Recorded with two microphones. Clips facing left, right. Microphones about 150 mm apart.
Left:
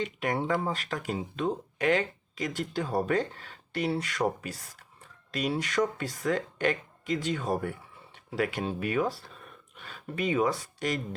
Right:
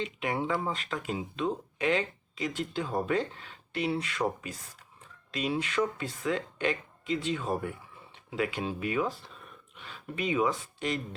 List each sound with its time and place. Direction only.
0.0 s speech: 45° left (ahead or behind)